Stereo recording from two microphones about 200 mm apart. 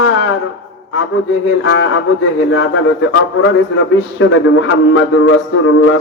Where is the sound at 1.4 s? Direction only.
75° left (ahead or behind).